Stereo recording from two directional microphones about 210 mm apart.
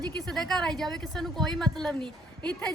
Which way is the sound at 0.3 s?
Centre (ahead or behind).